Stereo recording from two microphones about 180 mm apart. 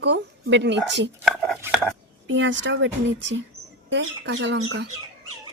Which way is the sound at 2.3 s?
90° right.